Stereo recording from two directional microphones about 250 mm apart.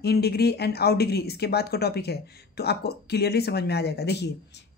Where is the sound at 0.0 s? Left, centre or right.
Left.